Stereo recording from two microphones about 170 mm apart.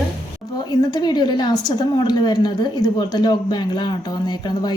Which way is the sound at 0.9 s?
25° left (ahead or behind).